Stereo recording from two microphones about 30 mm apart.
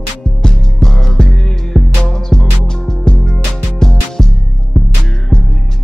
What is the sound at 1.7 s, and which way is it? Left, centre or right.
Music, centre.